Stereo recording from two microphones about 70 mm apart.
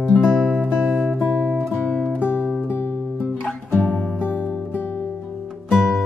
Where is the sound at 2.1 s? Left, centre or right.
Left.